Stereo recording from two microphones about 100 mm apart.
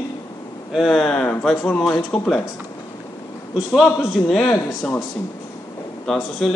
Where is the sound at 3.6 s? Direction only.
Centre (ahead or behind).